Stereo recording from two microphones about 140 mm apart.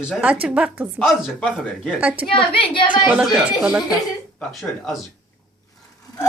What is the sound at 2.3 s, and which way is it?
Speech, 40° left (ahead or behind).